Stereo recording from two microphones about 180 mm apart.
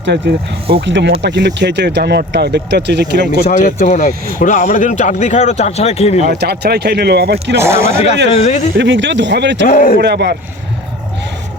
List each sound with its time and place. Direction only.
0.0 s speech: 70° right (ahead or behind)
0.9 s speech: 85° right
3.4 s speech: 50° left (ahead or behind)
6.4 s speech: 65° right (ahead or behind)
7.6 s speech: 15° right (ahead or behind)
8.3 s speech: 40° left (ahead or behind)
8.7 s speech: 85° right
9.6 s a man's voice: 50° left (ahead or behind)
10.0 s speech: 65° right (ahead or behind)